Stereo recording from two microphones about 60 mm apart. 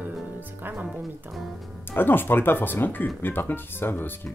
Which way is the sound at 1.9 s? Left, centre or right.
Left.